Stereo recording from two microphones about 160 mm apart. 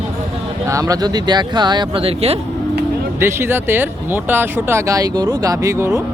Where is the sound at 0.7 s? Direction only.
20° right (ahead or behind); by 2.4 s 40° right (ahead or behind).